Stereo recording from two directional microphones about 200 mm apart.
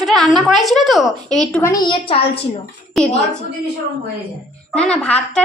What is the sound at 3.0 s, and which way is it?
Speech, centre (ahead or behind).